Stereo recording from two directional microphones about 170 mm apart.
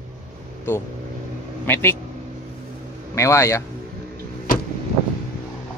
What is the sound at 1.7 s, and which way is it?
Speech, 15° left (ahead or behind).